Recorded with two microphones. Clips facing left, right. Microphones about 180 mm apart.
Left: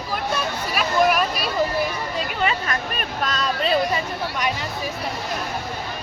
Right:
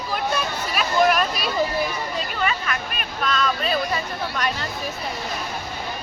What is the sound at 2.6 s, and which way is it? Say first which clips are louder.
Speech: left 2 dB; 40° left (ahead or behind).